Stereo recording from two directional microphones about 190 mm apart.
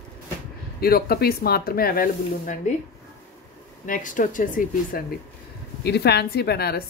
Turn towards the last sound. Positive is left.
turn(degrees=55)  # may be behind; listen again after turning